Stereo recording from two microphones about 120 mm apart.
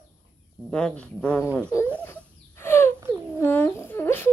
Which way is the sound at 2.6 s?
20° left (ahead or behind).